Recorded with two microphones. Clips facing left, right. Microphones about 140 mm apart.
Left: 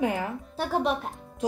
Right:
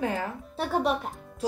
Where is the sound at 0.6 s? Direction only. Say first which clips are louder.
Even; centre (ahead or behind).